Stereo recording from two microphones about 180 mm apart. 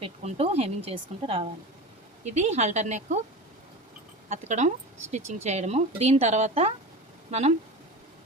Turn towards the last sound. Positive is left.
turn(degrees=-40)  # may be behind; listen again after turning